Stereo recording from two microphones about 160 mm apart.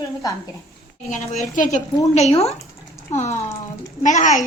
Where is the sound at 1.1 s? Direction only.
50° left (ahead or behind).